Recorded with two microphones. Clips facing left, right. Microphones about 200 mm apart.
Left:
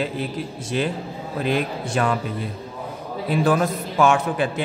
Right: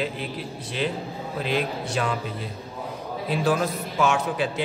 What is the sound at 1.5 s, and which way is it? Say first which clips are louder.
Speech: left 3 dB; 50° left (ahead or behind).